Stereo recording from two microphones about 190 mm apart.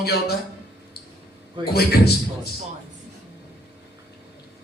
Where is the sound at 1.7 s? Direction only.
55° left (ahead or behind).